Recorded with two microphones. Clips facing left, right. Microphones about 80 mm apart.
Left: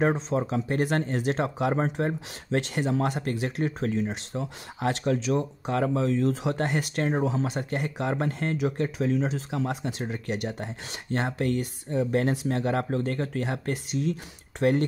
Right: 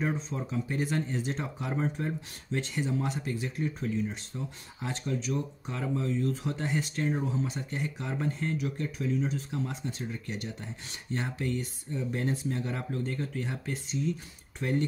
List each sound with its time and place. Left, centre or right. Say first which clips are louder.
0.0 s speech: left 8 dB; left